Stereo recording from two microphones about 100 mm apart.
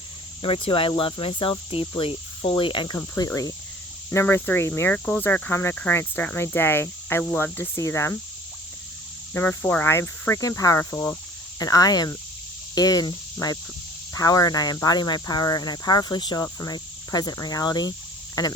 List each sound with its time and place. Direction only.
0.4 s cricket: 65° left (ahead or behind)
3.2 s speech: 30° left (ahead or behind)
9.3 s speech: 20° left (ahead or behind)
10.9 s cricket: 15° left (ahead or behind)
11.6 s speech: 40° left (ahead or behind)